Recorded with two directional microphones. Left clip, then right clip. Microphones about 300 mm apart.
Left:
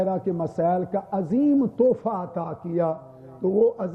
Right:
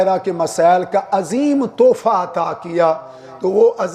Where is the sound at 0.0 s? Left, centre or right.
Centre.